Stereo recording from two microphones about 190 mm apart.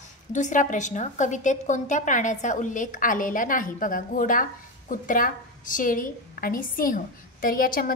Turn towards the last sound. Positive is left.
turn(degrees=50)  # may be behind; listen again after turning